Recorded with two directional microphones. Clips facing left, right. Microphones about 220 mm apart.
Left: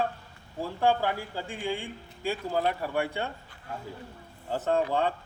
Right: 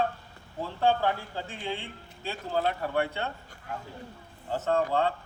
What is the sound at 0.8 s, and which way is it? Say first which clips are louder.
A man's voice: even; 10° left (ahead or behind).